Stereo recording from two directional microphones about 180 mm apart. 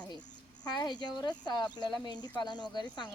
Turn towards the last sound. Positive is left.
turn(degrees=25)  # may be behind; listen again after turning